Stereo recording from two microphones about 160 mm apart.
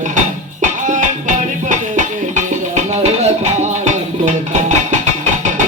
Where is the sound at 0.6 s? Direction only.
50° right (ahead or behind).